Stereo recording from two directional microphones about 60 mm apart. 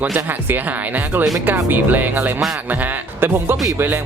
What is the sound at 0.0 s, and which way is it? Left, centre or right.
Speech, right.